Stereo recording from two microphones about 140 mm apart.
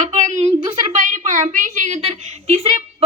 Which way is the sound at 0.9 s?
65° right (ahead or behind).